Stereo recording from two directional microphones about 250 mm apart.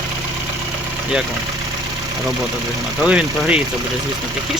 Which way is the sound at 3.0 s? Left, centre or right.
Centre.